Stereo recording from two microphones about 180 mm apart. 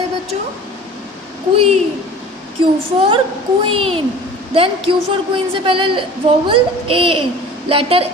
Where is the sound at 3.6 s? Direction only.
30° right (ahead or behind).